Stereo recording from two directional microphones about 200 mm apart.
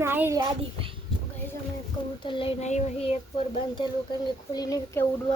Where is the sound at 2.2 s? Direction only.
25° left (ahead or behind).